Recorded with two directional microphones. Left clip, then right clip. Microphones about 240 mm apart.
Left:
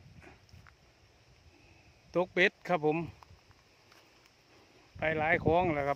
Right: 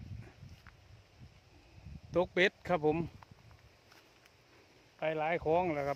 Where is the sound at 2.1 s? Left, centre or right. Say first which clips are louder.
Left 2 dB; centre.